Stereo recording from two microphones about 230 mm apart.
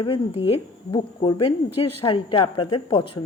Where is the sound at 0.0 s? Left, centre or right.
Left.